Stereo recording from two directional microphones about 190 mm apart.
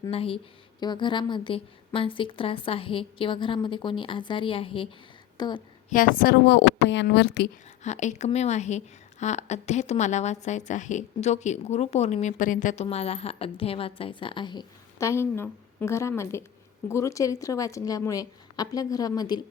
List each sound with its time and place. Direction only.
0.1 s a woman's voice: 30° left (ahead or behind)
5.9 s speech: 45° left (ahead or behind); by 7.5 s 65° left (ahead or behind)
7.9 s a woman's voice: 40° left (ahead or behind); by 19.4 s 20° left (ahead or behind)